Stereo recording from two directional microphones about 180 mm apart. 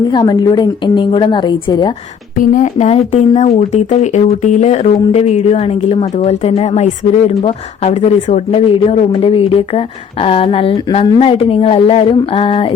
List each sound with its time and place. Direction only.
0.1 s a woman's voice: 25° left (ahead or behind)
2.4 s speech: 50° left (ahead or behind); by 12.6 s 30° left (ahead or behind)